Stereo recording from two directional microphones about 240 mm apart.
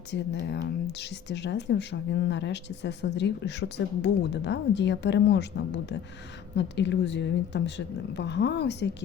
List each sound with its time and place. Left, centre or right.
0.1 s speech: left